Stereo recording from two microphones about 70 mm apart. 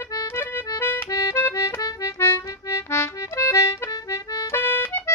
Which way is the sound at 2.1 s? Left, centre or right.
Left.